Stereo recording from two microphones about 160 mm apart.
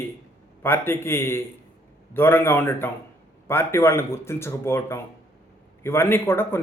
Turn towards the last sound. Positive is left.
turn(degrees=15)  # may be behind; listen again after turning